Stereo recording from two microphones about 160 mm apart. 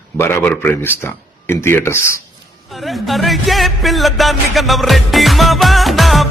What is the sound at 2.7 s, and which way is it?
A man's voice, centre (ahead or behind).